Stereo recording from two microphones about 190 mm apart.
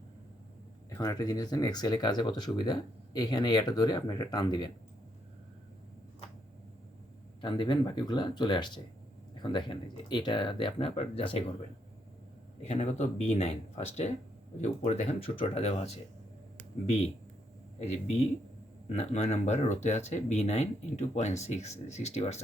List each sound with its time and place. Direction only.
0.9 s speech: 20° left (ahead or behind)
7.4 s speech: 25° left (ahead or behind)
12.6 s speech: 35° left (ahead or behind)
17.8 s speech: 35° left (ahead or behind)